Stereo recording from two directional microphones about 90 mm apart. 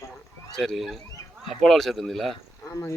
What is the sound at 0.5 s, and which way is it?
Speech, centre (ahead or behind).